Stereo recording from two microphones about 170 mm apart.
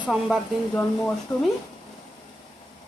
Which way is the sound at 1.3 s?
25° left (ahead or behind).